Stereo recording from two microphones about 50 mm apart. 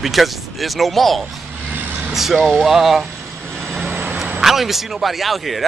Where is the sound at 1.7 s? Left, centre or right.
Right.